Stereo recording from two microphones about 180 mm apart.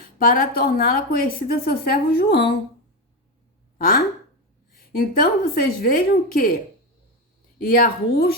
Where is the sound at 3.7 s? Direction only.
50° left (ahead or behind).